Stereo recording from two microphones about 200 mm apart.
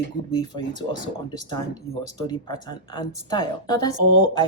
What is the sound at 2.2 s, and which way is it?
Speech, 20° left (ahead or behind).